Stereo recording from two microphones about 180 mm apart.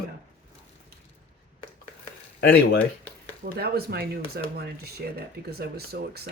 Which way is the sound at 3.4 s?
60° right (ahead or behind).